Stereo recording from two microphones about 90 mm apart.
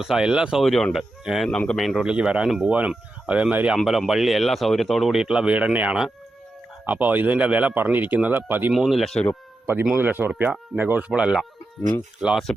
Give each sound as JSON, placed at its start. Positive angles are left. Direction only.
{"t": 0.0, "sound": "speech", "side_deg": -10}
{"t": 0.6, "sound": "speech", "side_deg": 5}
{"t": 1.5, "sound": "speech", "side_deg": 10}
{"t": 2.0, "sound": "speech", "side_deg": -10}
{"t": 3.8, "sound": "speech", "side_deg": 0}
{"t": 8.7, "sound": "speech", "side_deg": -5}
{"t": 9.9, "sound": "speech", "side_deg": -20}
{"t": 11.1, "sound": "speech", "side_deg": -10}
{"t": 12.5, "sound": "speech", "side_deg": 5}